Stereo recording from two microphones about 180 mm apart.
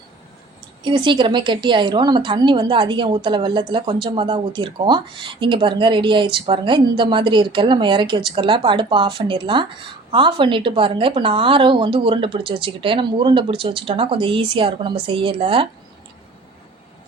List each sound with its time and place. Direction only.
0.9 s a woman's voice: 25° right (ahead or behind)